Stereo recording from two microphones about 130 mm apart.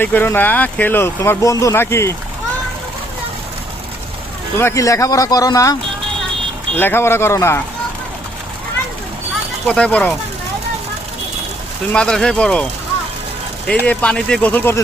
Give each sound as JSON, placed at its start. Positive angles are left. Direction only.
{"t": 0.0, "sound": "speech", "side_deg": 15}
{"t": 4.5, "sound": "speech", "side_deg": 20}
{"t": 6.7, "sound": "speech", "side_deg": 15}
{"t": 9.6, "sound": "speech", "side_deg": 5}
{"t": 11.9, "sound": "speech", "side_deg": 5}
{"t": 13.8, "sound": "speech", "side_deg": 10}